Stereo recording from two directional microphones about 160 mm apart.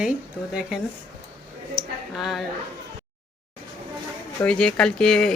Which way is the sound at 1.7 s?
Centre (ahead or behind).